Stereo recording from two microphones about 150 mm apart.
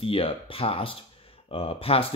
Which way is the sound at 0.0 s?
40° left (ahead or behind).